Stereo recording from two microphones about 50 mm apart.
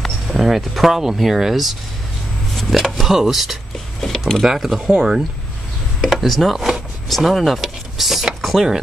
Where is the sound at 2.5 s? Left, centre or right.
Centre.